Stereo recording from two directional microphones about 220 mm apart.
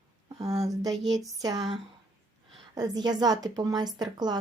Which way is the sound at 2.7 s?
15° right (ahead or behind).